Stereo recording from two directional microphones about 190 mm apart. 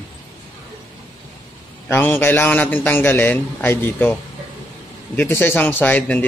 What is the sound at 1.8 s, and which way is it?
Speech, 10° left (ahead or behind).